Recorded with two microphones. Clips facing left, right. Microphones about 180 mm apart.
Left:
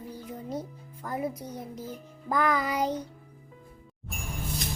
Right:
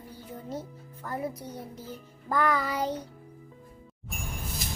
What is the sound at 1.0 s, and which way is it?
Speech, 10° left (ahead or behind).